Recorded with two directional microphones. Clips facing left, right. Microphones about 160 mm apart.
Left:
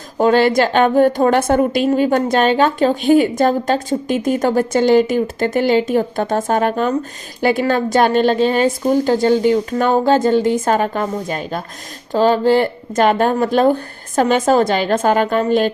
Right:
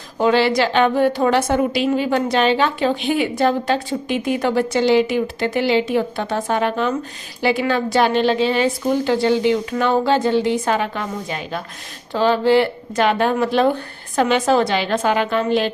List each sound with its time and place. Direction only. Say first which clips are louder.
0.2 s a woman's voice: left 3 dB; 45° left (ahead or behind)